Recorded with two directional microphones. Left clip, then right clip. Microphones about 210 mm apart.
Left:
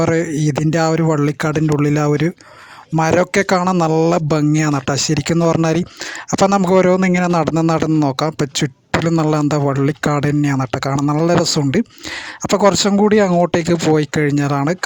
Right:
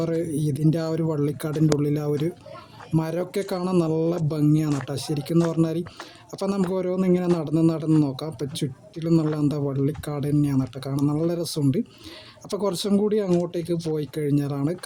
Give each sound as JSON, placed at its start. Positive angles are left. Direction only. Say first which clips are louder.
{"t": 0.0, "sound": "speech", "louder": "left 9 dB", "side_deg": -50}